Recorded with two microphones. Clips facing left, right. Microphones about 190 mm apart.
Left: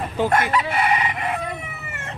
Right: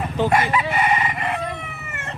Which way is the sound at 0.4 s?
5° right (ahead or behind).